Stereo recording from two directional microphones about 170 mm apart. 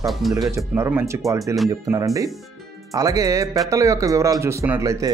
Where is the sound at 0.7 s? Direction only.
15° right (ahead or behind).